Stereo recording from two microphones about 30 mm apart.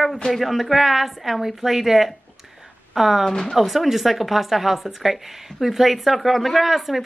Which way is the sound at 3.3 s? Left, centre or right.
Centre.